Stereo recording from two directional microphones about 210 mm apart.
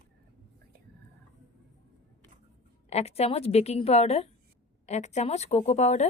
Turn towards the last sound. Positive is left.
turn(degrees=30)  # may be behind; listen again after turning